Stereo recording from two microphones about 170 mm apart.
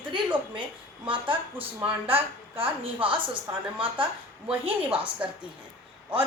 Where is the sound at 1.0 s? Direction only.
30° right (ahead or behind).